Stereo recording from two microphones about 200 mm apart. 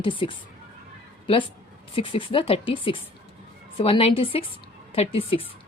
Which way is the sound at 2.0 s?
25° left (ahead or behind).